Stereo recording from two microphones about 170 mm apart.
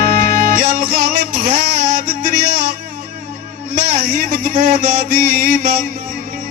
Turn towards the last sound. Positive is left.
turn(degrees=-60)  # may be behind; listen again after turning